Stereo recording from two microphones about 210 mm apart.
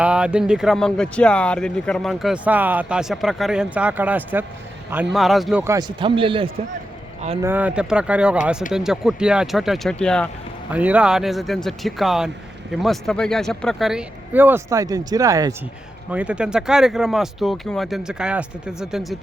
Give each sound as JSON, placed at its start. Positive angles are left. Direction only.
{"t": 0.0, "sound": "speech", "side_deg": -5}
{"t": 5.6, "sound": "a man's voice", "side_deg": -20}
{"t": 7.4, "sound": "speech", "side_deg": -5}